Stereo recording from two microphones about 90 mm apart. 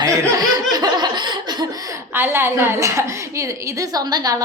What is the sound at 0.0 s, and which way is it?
Laughter, 45° right (ahead or behind).